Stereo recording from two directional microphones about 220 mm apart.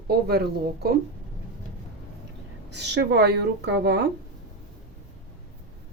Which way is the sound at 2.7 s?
50° right (ahead or behind).